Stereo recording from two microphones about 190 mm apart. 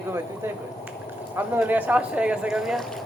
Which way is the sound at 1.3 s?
10° right (ahead or behind).